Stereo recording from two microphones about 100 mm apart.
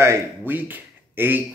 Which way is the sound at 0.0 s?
25° right (ahead or behind).